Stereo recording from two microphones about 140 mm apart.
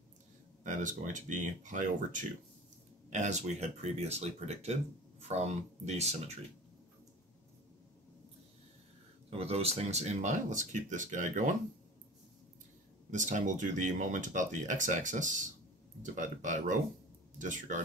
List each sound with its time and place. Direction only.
0.7 s speech: 65° right (ahead or behind)
9.3 s speech: 45° right (ahead or behind); by 11.5 s 65° right (ahead or behind)
13.1 s speech: 65° right (ahead or behind)